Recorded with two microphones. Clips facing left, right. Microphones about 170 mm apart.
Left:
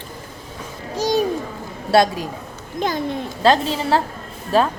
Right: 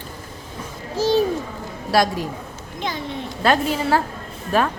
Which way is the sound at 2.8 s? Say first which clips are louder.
Left 6 dB; 45° left (ahead or behind).